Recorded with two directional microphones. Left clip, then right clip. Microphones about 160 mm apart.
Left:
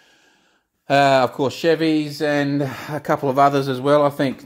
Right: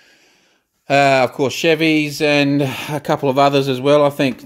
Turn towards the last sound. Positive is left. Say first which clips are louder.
# right 3 dB
turn(degrees=-25)  # may be behind; listen again after turning